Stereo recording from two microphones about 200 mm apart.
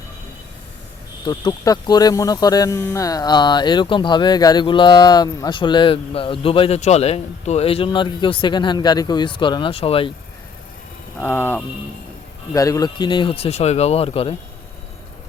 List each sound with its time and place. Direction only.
1.2 s speech: 20° left (ahead or behind)
11.2 s speech: 10° left (ahead or behind); by 14.3 s 30° left (ahead or behind)